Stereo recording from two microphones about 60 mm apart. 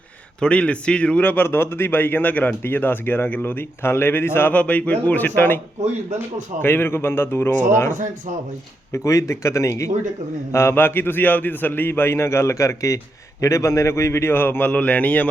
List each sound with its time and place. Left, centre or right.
0.3 s a man's voice: centre
1.2 s a man's voice: left
4.5 s a man's voice: left
6.6 s a man's voice: left
8.9 s speech: left
10.5 s a man's voice: left
14.7 s a man's voice: left